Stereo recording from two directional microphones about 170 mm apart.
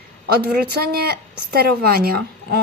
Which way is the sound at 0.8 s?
65° right (ahead or behind).